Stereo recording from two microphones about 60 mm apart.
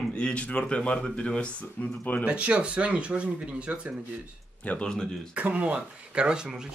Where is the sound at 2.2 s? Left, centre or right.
Right.